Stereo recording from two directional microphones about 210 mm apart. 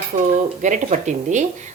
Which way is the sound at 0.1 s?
35° right (ahead or behind).